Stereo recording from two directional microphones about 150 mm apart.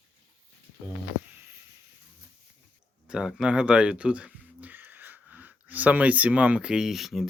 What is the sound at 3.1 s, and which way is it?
Speech, 5° right (ahead or behind).